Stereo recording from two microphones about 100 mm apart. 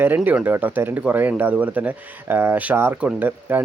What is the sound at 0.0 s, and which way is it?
Speech, 20° right (ahead or behind).